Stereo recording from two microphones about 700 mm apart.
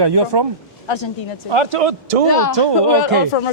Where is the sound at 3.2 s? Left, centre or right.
Left.